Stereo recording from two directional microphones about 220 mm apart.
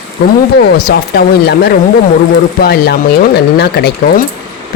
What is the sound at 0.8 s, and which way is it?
Speech, 45° left (ahead or behind).